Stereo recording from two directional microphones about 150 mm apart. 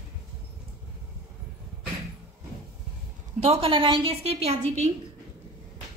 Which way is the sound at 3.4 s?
40° right (ahead or behind).